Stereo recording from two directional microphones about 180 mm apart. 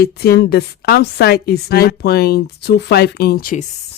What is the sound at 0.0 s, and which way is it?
Speech, 60° left (ahead or behind).